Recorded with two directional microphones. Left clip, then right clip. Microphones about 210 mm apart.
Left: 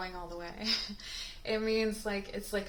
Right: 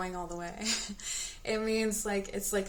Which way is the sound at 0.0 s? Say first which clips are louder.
Right 3 dB; 35° right (ahead or behind).